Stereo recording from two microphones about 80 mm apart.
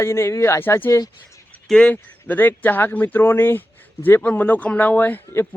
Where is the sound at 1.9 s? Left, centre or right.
Left.